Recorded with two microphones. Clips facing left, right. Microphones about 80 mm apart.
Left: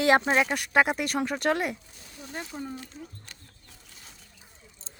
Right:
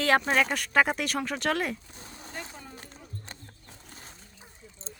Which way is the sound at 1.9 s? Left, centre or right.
Right.